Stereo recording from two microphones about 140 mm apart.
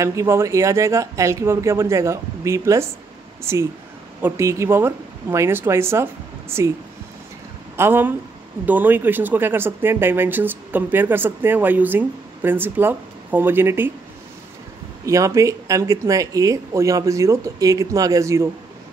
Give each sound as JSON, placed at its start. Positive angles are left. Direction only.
{"t": 0.0, "sound": "speech", "side_deg": -20}
{"t": 4.2, "sound": "speech", "side_deg": -20}
{"t": 7.7, "sound": "speech", "side_deg": -15}
{"t": 15.0, "sound": "speech", "side_deg": -20}